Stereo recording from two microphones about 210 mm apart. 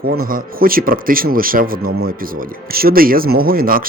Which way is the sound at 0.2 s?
45° right (ahead or behind).